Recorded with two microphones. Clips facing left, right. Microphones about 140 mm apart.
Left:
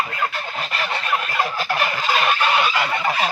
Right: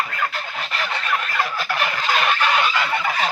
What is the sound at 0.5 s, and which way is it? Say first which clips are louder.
Fowl: left 1 dB; 15° left (ahead or behind).